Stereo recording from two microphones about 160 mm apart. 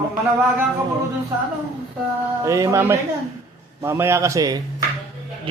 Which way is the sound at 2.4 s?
20° right (ahead or behind).